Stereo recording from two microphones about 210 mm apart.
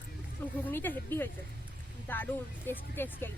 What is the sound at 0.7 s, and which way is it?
Speech, 10° left (ahead or behind).